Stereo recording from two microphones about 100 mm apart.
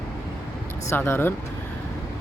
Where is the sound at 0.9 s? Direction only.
25° left (ahead or behind).